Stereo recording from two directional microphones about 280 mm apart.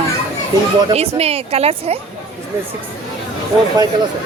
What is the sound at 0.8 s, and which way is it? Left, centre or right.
Speech, right.